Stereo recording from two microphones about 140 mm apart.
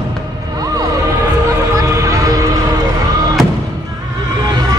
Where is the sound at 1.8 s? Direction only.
20° right (ahead or behind).